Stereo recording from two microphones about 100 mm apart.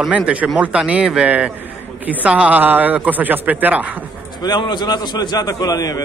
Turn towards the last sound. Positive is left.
turn(degrees=40)  # may be behind; listen again after turning